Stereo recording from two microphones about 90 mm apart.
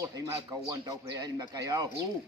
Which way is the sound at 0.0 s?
40° right (ahead or behind).